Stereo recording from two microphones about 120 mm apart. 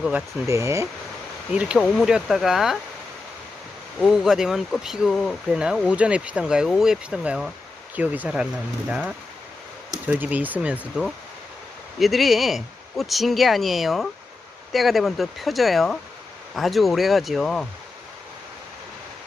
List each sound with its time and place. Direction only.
0.4 s speech: 25° right (ahead or behind)
1.5 s speech: 10° right (ahead or behind)
4.0 s speech: centre (ahead or behind)